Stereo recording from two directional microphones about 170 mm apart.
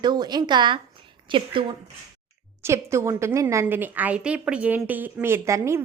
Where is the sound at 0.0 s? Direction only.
25° right (ahead or behind).